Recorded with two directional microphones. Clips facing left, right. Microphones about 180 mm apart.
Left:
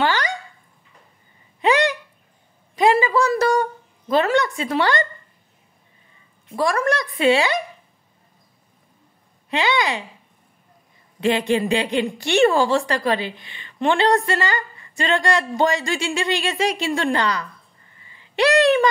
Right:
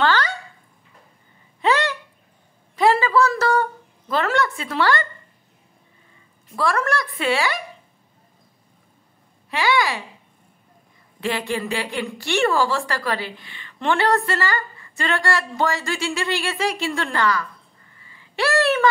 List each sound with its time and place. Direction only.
0.0 s dog: 15° left (ahead or behind)
1.6 s a sound: 15° left (ahead or behind)
4.1 s a woman's voice: 20° left (ahead or behind)
6.5 s a woman's voice: 15° left (ahead or behind)
9.5 s a woman's voice: 20° left (ahead or behind)
11.1 s a woman's voice: 20° left (ahead or behind)
18.0 s a sound: 20° left (ahead or behind)